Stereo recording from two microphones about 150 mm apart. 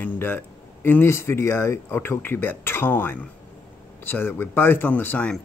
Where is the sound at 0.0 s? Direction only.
15° left (ahead or behind).